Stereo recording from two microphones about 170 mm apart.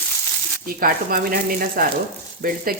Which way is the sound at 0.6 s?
60° right (ahead or behind).